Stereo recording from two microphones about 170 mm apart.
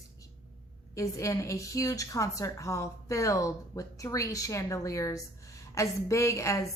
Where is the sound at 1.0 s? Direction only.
20° left (ahead or behind).